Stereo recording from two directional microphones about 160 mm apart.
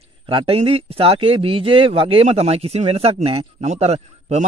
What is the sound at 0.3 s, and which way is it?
Speech, 35° right (ahead or behind).